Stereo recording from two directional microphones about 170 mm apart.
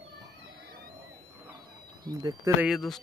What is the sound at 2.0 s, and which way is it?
Speech, 20° right (ahead or behind).